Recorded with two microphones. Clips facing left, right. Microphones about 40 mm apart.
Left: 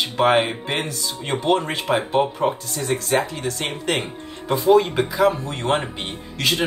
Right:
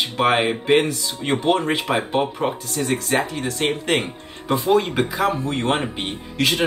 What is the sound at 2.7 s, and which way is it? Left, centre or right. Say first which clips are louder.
Speech: right 2 dB; right.